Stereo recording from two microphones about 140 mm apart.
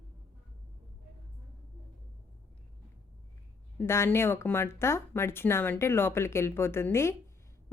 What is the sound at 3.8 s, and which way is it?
Speech, 15° left (ahead or behind).